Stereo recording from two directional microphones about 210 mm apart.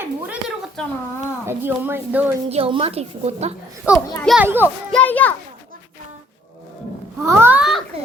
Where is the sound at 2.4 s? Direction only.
30° right (ahead or behind).